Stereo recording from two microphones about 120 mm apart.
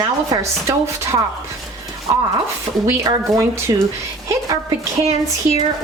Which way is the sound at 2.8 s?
25° right (ahead or behind).